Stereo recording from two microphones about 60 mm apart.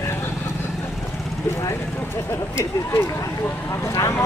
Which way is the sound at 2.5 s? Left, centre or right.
Left.